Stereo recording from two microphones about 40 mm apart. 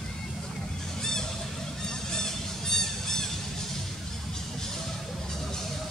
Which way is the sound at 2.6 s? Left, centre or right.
Centre.